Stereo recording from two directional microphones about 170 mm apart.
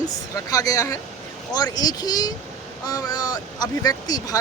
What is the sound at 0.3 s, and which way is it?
Speech, 20° left (ahead or behind).